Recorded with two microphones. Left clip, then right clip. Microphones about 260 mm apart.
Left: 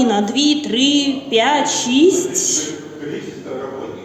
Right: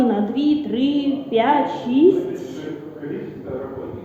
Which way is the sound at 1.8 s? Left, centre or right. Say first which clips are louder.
Left 4 dB; left.